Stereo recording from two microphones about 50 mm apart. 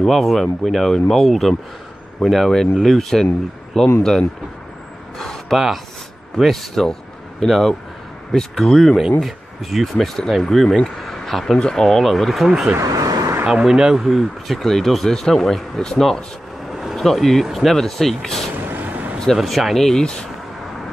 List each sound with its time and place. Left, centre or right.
0.0 s speech: centre
5.5 s speech: centre
12.7 s vehicle: right
13.5 s speech: centre
18.5 s vehicle: right
19.3 s speech: centre